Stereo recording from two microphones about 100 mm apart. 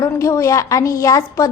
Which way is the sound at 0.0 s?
30° left (ahead or behind).